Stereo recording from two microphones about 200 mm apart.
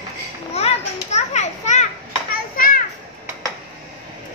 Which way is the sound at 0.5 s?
35° left (ahead or behind).